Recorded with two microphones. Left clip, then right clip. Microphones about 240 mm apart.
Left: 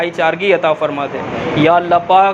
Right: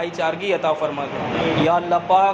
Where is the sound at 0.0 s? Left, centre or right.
Left.